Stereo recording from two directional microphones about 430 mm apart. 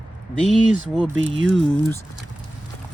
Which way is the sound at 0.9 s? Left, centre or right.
Centre.